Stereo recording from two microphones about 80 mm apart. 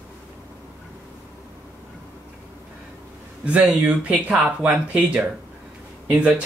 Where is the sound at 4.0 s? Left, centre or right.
Centre.